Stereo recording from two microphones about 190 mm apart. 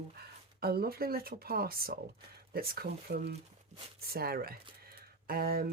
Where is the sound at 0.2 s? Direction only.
55° right (ahead or behind).